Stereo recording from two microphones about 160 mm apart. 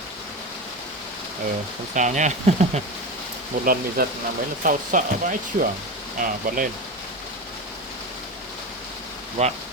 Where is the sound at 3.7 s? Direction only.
65° right (ahead or behind).